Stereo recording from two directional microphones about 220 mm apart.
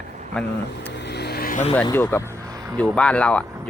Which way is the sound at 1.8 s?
10° left (ahead or behind).